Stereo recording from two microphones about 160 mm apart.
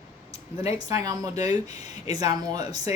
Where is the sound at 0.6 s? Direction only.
40° left (ahead or behind).